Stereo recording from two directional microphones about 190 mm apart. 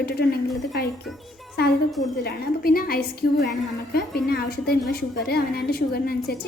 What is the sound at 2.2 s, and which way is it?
A woman's voice, 50° left (ahead or behind).